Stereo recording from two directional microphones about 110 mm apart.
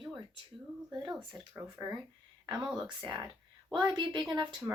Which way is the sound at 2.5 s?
10° right (ahead or behind).